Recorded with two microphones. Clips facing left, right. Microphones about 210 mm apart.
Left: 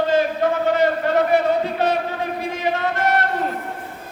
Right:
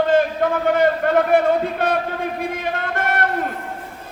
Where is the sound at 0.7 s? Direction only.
55° right (ahead or behind).